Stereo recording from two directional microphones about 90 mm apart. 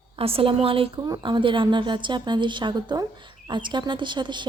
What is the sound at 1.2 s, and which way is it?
A woman's voice, 65° right (ahead or behind).